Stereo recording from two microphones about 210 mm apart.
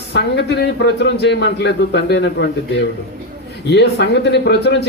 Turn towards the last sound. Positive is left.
turn(degrees=55)  # may be behind; listen again after turning